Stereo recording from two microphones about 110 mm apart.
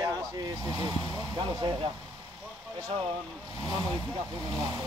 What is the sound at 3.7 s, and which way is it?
Speech, 40° right (ahead or behind).